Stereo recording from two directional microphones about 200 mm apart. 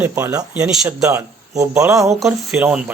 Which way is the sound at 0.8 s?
15° right (ahead or behind).